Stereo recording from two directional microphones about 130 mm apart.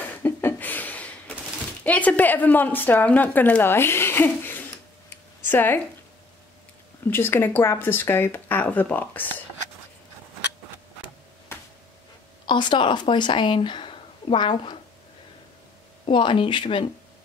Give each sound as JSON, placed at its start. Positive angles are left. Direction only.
{"t": 0.0, "sound": "a sound", "side_deg": 15}
{"t": 1.9, "sound": "speech", "side_deg": 10}
{"t": 7.1, "sound": "speech", "side_deg": 15}
{"t": 11.5, "sound": "a sound", "side_deg": 20}
{"t": 12.4, "sound": "speech", "side_deg": 35}
{"t": 16.1, "sound": "speech", "side_deg": 40}